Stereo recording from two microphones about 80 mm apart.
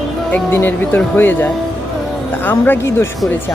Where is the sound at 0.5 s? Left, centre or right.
Left.